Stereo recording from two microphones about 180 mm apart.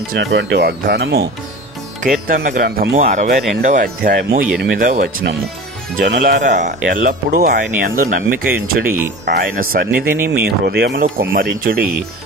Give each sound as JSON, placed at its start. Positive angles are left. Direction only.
{"t": 0.2, "sound": "speech", "side_deg": -75}
{"t": 2.0, "sound": "speech", "side_deg": -50}
{"t": 6.5, "sound": "speech", "side_deg": -45}